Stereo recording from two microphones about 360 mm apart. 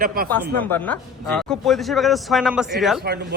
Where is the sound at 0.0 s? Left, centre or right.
Right.